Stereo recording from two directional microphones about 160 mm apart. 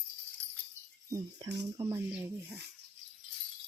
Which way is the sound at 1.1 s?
20° right (ahead or behind).